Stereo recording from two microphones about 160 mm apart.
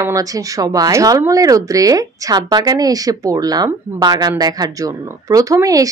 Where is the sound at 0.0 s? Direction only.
20° right (ahead or behind).